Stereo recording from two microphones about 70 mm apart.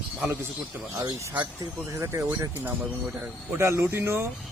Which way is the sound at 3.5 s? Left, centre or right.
Right.